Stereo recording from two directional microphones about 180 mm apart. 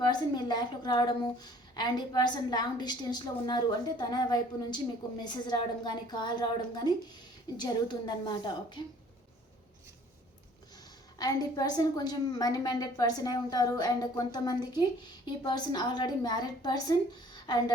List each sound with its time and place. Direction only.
0.1 s a woman's voice: 25° left (ahead or behind)
11.2 s a woman's voice: 20° left (ahead or behind)
17.3 s a sound: 25° left (ahead or behind)